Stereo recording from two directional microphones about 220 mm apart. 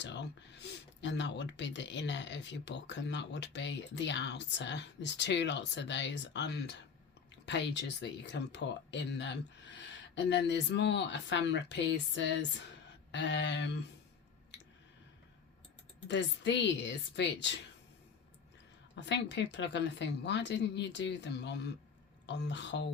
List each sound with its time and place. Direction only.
0.0 s speech: 55° left (ahead or behind)
14.5 s a sound: 50° left (ahead or behind)
16.0 s speech: 55° left (ahead or behind)
18.9 s speech: 55° left (ahead or behind)